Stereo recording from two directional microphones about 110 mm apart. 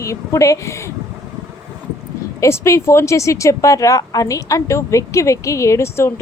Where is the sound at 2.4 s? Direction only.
25° left (ahead or behind).